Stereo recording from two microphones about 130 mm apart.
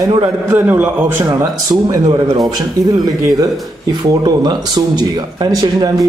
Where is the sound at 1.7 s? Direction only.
35° right (ahead or behind).